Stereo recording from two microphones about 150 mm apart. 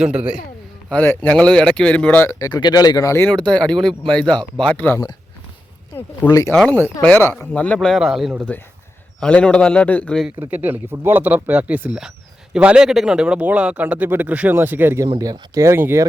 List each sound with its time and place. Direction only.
0.0 s speech: 5° right (ahead or behind)
0.9 s speech: 10° left (ahead or behind)
2.4 s speech: 30° left (ahead or behind)
3.5 s speech: 5° left (ahead or behind)
6.2 s speech: 20° left (ahead or behind)
6.5 s speech: 5° left (ahead or behind)
8.5 s speech: 10° left (ahead or behind)
10.4 s speech: 10° right (ahead or behind)